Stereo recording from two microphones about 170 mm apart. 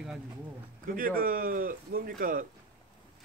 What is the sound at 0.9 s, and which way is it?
Speech, 55° right (ahead or behind).